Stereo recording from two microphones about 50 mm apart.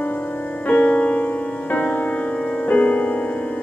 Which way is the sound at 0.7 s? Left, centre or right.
Left.